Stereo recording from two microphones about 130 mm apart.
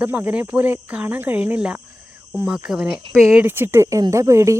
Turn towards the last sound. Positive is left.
turn(degrees=-25)  # may be behind; listen again after turning